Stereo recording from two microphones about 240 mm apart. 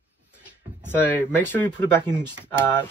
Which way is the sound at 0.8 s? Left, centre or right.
Centre.